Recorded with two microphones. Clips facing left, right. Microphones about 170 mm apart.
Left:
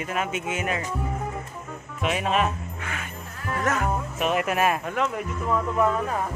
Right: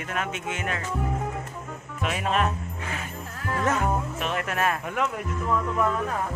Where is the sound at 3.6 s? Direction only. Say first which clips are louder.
Even; 25° right (ahead or behind).